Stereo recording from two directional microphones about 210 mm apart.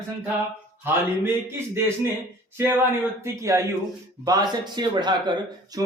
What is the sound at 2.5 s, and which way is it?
A man's voice, 10° right (ahead or behind).